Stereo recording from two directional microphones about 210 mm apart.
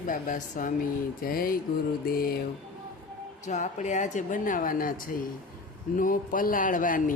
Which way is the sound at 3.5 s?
35° left (ahead or behind).